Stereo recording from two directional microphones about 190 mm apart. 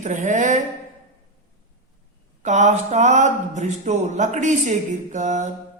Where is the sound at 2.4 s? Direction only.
40° right (ahead or behind).